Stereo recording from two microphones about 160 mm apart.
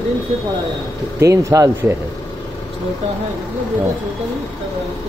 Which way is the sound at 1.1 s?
20° right (ahead or behind).